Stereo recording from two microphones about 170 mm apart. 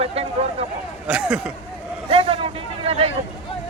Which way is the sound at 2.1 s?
35° right (ahead or behind).